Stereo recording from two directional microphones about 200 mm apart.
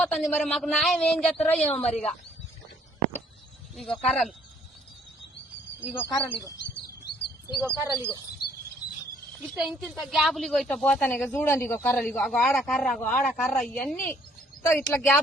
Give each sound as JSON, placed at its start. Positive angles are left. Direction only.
{"t": 0.0, "sound": "a woman's voice", "side_deg": 0}
{"t": 1.7, "sound": "a woman's voice", "side_deg": 30}
{"t": 3.8, "sound": "a woman's voice", "side_deg": 5}
{"t": 5.9, "sound": "speech", "side_deg": 10}
{"t": 7.6, "sound": "speech", "side_deg": -15}
{"t": 9.4, "sound": "a woman's voice", "side_deg": 0}